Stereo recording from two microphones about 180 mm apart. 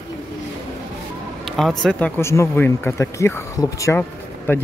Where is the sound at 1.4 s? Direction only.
Centre (ahead or behind).